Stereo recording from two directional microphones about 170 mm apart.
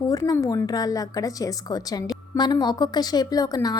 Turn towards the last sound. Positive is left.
turn(degrees=20)  # may be behind; listen again after turning